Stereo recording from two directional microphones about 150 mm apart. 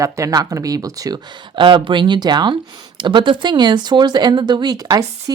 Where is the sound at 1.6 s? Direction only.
35° right (ahead or behind).